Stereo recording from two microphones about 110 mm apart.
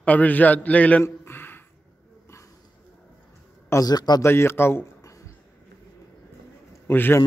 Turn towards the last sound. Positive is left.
turn(degrees=20)  # may be behind; listen again after turning